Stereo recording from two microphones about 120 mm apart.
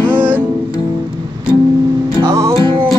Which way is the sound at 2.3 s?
25° right (ahead or behind).